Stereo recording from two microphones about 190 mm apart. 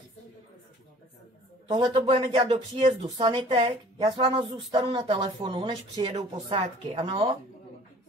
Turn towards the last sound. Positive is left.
turn(degrees=-30)  # may be behind; listen again after turning